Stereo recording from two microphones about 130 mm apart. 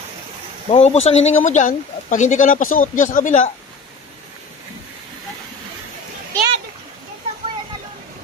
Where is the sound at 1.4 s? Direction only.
75° left (ahead or behind).